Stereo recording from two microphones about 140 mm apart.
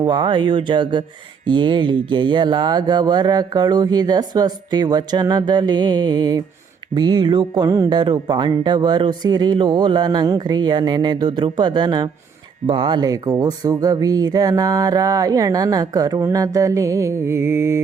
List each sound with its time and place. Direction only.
0.0 s music: 35° right (ahead or behind)
1.5 s speech: 35° right (ahead or behind)
6.9 s music: 30° right (ahead or behind)
12.6 s speech: 40° right (ahead or behind); by 17.7 s 20° right (ahead or behind)